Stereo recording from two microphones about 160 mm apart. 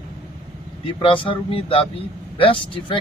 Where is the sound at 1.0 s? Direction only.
30° left (ahead or behind).